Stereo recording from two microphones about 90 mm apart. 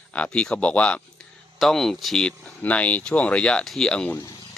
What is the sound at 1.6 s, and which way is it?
Speech, 5° left (ahead or behind).